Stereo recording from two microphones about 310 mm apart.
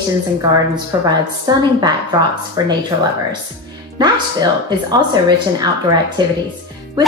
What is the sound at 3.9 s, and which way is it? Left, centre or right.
Speech, centre.